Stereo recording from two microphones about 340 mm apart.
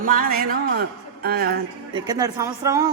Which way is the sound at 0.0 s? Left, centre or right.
Right.